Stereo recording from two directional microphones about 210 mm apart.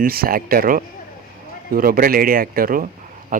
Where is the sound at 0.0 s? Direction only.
45° right (ahead or behind).